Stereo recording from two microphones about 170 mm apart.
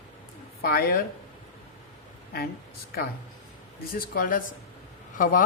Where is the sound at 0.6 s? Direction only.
65° left (ahead or behind).